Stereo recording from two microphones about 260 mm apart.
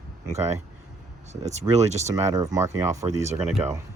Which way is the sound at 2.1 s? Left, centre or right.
Centre.